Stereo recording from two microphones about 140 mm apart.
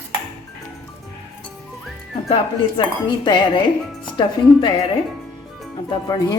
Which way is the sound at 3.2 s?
35° left (ahead or behind).